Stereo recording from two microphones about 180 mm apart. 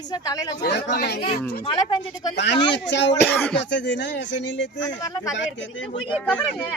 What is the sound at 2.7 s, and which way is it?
Speech, 75° left (ahead or behind).